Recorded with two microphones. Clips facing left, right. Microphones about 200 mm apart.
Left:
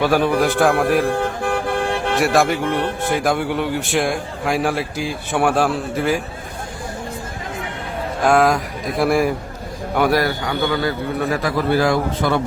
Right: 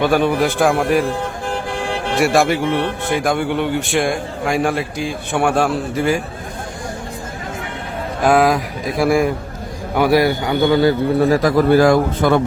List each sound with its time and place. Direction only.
0.0 s a man's voice: 5° left (ahead or behind)
1.5 s vehicle: 55° left (ahead or behind)
2.1 s a man's voice: centre (ahead or behind)
8.2 s a man's voice: centre (ahead or behind)
10.2 s a man's voice: 15° right (ahead or behind); by 12.4 s 50° right (ahead or behind)